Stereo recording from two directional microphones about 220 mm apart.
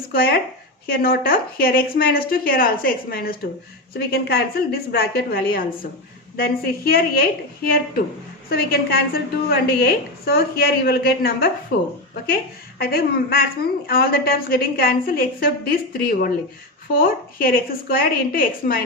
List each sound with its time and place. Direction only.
0.1 s a woman's voice: 45° left (ahead or behind)
12.8 s a woman's voice: 45° left (ahead or behind)